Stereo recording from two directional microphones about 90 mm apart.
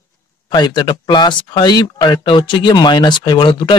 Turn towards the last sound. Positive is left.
turn(degrees=65)  # may be behind; listen again after turning